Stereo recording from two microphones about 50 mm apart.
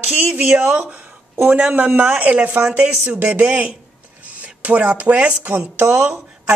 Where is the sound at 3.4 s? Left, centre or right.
Right.